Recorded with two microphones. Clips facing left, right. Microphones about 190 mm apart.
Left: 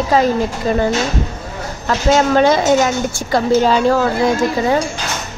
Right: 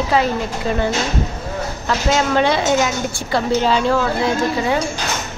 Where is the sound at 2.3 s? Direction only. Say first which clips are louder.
Left 4 dB; 45° left (ahead or behind).